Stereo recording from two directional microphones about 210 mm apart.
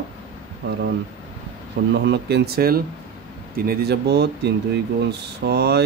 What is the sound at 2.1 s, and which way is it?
Speech, 50° right (ahead or behind).